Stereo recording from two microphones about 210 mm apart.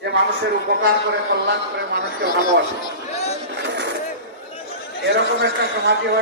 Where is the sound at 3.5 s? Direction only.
55° right (ahead or behind).